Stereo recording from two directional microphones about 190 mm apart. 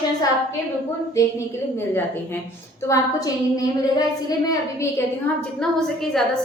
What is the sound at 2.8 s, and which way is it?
A woman's voice, 20° left (ahead or behind).